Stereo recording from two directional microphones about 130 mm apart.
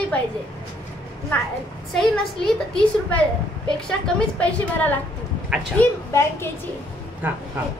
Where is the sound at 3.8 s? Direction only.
5° left (ahead or behind).